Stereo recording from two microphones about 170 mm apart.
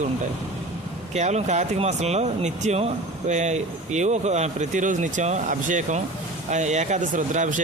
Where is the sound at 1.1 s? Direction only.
40° right (ahead or behind).